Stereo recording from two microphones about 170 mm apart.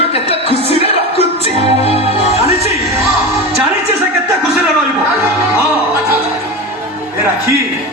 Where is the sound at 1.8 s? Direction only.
35° left (ahead or behind).